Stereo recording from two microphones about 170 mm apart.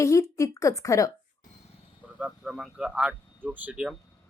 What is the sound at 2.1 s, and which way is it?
Speech, 5° right (ahead or behind).